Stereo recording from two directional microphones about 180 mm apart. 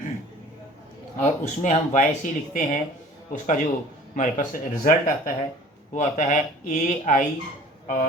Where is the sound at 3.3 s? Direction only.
45° left (ahead or behind).